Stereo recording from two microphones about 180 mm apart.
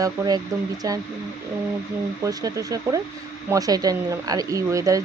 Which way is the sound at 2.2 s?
20° right (ahead or behind).